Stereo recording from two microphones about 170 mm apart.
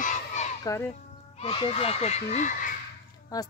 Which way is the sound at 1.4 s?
35° left (ahead or behind).